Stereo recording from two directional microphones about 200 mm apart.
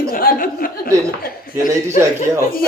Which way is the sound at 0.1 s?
45° left (ahead or behind).